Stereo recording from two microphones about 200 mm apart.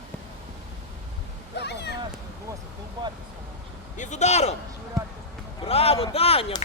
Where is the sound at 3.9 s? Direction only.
35° left (ahead or behind).